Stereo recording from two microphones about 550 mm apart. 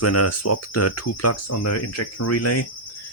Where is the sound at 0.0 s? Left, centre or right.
Left.